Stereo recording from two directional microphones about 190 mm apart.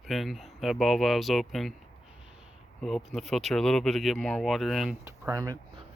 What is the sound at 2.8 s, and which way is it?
Speech, centre (ahead or behind).